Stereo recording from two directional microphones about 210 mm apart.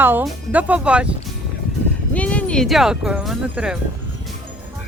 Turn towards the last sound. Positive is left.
turn(degrees=-5)  # may be behind; listen again after turning